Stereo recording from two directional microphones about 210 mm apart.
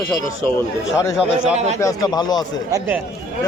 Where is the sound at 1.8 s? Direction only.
20° left (ahead or behind).